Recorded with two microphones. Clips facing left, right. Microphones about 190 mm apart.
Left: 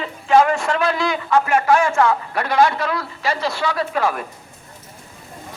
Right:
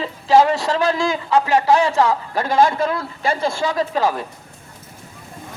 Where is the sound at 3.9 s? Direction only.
30° right (ahead or behind).